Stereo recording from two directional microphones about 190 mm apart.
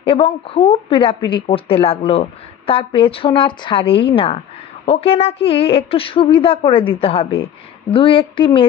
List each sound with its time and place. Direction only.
0.0 s speech: 30° left (ahead or behind)